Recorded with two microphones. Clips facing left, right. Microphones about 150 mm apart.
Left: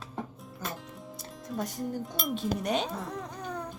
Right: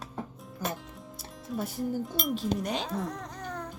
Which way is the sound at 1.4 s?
5° right (ahead or behind).